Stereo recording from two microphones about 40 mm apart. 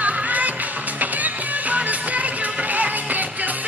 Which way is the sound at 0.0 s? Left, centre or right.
Right.